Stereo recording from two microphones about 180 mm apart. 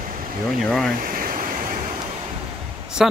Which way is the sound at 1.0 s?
50° right (ahead or behind).